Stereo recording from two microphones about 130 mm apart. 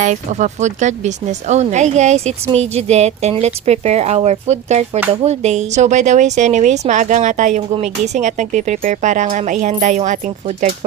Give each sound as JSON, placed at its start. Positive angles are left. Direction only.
{"t": 0.0, "sound": "speech", "side_deg": -65}